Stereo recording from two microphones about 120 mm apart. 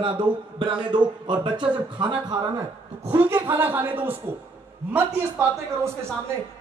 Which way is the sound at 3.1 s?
20° right (ahead or behind).